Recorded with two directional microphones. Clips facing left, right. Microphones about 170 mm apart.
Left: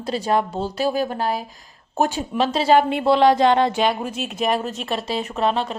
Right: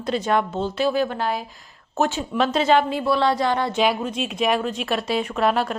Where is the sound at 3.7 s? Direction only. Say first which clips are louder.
Even; centre (ahead or behind).